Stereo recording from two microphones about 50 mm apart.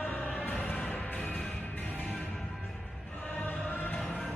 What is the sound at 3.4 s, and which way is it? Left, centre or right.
Music, left.